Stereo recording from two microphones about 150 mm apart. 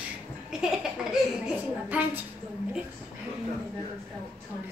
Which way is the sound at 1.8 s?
10° right (ahead or behind).